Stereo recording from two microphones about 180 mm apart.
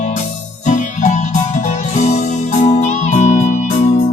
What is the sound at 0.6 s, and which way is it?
Music, 40° left (ahead or behind).